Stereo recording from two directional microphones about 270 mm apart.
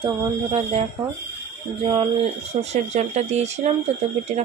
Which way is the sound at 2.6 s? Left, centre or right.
Right.